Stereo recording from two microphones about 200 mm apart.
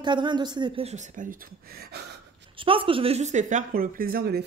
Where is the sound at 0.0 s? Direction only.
25° right (ahead or behind); by 2.0 s 50° right (ahead or behind).